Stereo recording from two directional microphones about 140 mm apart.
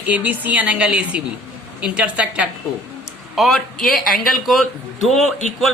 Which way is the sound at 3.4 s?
5° left (ahead or behind).